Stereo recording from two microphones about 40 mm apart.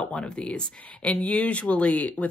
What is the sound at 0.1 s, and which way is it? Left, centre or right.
Speech, left.